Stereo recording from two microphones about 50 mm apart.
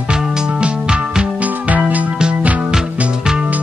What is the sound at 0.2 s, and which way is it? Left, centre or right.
Music, centre.